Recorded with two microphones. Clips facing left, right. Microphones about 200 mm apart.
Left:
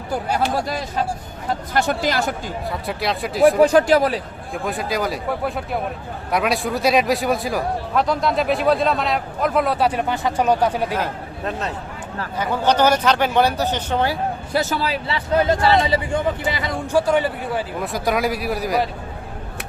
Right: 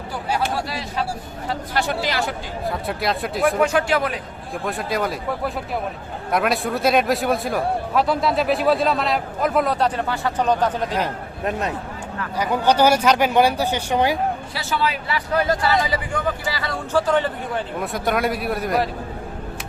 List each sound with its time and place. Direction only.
0.5 s speech: 45° left (ahead or behind)
2.6 s a man's voice: centre (ahead or behind)
3.6 s speech: 35° left (ahead or behind)
4.6 s a man's voice: centre (ahead or behind)
10.9 s a man's voice: 15° right (ahead or behind)
14.5 s speech: 45° left (ahead or behind)
15.0 s speech: 25° left (ahead or behind); by 18.9 s centre (ahead or behind)